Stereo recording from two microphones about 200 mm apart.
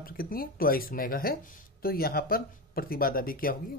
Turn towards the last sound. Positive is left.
turn(degrees=45)  # may be behind; listen again after turning